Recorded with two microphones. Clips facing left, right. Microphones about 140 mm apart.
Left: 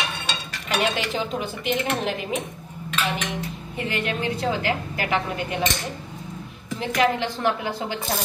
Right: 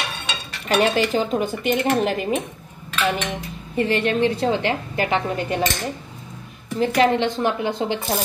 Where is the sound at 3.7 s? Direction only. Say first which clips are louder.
Right 8 dB; 30° right (ahead or behind).